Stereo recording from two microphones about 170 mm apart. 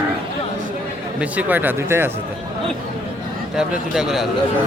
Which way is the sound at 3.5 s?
5° right (ahead or behind).